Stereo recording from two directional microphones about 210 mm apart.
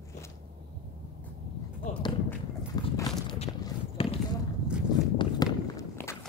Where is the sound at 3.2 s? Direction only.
30° left (ahead or behind).